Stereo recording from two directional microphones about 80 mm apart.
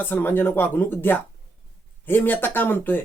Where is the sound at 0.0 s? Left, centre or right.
Left.